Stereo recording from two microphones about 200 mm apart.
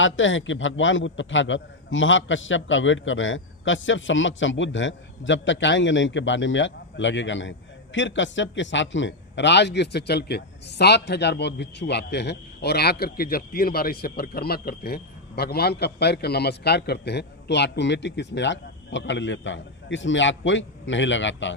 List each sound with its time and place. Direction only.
0.0 s a man's voice: 75° left (ahead or behind)